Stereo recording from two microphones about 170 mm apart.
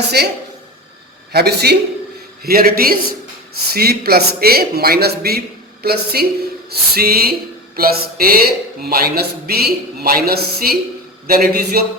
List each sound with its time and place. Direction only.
0.1 s speech: 70° right (ahead or behind)
2.4 s speech: 60° right (ahead or behind)